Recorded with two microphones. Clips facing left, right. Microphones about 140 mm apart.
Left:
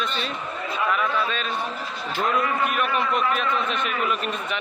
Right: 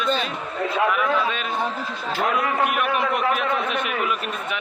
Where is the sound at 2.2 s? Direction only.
75° right (ahead or behind).